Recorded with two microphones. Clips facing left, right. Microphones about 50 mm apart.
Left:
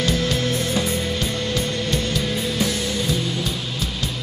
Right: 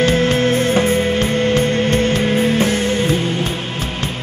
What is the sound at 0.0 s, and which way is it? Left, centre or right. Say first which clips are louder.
Music: right 7 dB; right.